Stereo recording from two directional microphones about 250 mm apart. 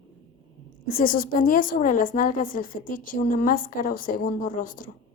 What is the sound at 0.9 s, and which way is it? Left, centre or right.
A woman's voice, left.